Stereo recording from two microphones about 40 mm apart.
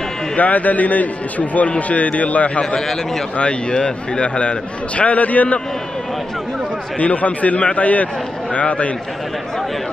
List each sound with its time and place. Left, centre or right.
0.4 s a man's voice: left
2.6 s a man's voice: centre
3.3 s a man's voice: left
7.0 s a man's voice: left